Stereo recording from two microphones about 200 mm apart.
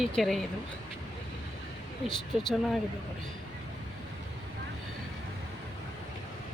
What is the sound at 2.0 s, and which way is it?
Speech, centre (ahead or behind).